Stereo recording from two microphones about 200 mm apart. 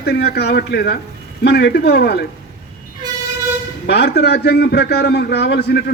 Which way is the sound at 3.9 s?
55° left (ahead or behind).